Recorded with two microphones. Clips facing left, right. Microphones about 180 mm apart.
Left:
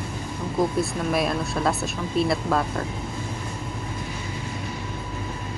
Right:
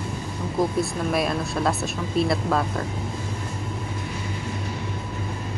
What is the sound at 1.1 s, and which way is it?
Speech, centre (ahead or behind).